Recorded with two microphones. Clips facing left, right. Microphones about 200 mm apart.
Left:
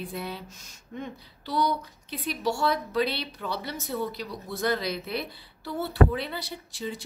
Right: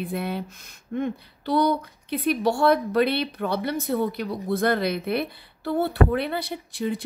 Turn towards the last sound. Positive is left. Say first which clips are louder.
# right 7 dB
turn(degrees=-55)  # may be behind; listen again after turning